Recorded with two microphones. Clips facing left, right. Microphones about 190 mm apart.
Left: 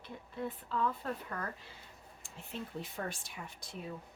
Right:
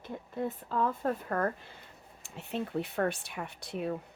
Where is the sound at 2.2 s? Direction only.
70° right (ahead or behind).